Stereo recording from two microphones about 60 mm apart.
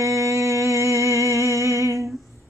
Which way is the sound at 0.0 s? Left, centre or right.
Right.